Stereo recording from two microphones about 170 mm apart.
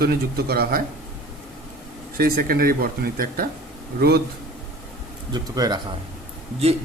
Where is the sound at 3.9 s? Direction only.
70° right (ahead or behind).